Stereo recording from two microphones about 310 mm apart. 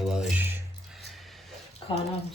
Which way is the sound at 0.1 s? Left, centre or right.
Centre.